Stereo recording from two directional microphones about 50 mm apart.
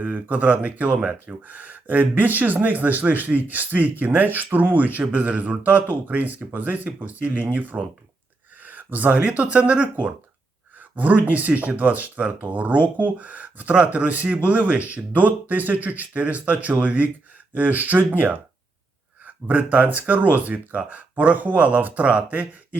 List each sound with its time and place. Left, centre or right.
0.0 s speech: right